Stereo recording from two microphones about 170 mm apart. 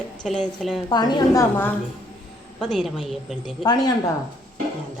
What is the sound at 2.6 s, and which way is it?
Speech, centre (ahead or behind).